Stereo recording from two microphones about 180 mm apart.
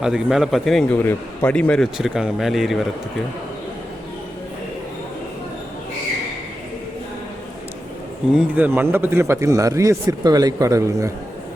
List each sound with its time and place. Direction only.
0.0 s a man's voice: 5° right (ahead or behind)
8.3 s a man's voice: 5° right (ahead or behind)